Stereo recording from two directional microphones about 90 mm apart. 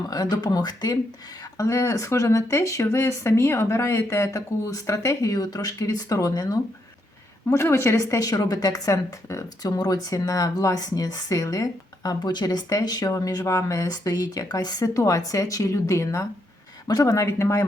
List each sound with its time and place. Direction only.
0.1 s a woman's voice: 45° left (ahead or behind)
1.5 s speech: 35° left (ahead or behind)
7.5 s a woman's voice: 30° left (ahead or behind); by 13.1 s 45° left (ahead or behind)
13.1 s speech: 35° left (ahead or behind)